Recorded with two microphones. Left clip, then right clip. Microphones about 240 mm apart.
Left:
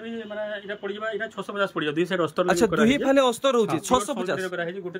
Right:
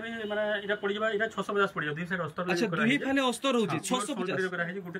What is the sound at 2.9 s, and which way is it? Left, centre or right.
A man's voice, centre.